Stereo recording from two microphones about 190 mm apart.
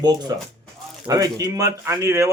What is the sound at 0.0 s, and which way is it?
Speech, 20° right (ahead or behind).